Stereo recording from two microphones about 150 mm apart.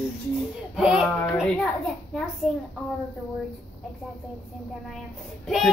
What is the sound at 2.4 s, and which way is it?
Child singing, centre (ahead or behind).